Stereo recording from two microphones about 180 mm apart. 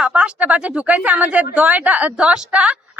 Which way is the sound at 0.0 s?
5° right (ahead or behind).